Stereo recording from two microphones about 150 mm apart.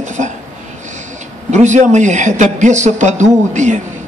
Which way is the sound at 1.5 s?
55° right (ahead or behind).